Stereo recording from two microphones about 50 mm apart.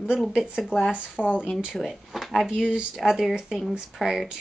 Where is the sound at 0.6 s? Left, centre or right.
Centre.